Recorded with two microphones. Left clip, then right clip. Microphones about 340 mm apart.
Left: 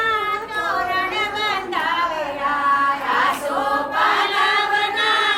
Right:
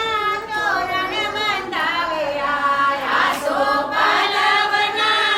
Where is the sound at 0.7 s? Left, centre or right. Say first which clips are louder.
Even; centre.